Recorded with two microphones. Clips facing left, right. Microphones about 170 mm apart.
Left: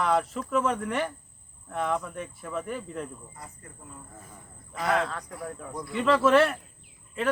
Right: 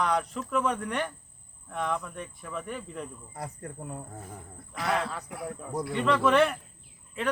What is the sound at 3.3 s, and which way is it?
Speech, 70° right (ahead or behind).